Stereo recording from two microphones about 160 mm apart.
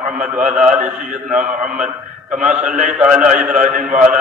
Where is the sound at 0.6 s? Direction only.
55° right (ahead or behind).